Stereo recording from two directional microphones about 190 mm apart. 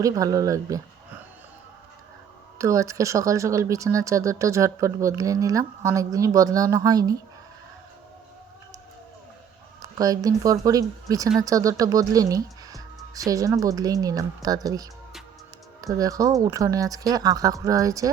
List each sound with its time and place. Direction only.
0.0 s speech: 20° right (ahead or behind)
2.6 s speech: 15° right (ahead or behind)
9.8 s speech: 20° right (ahead or behind)